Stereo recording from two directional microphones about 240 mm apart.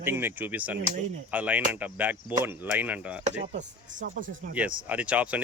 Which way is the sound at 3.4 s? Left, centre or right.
Right.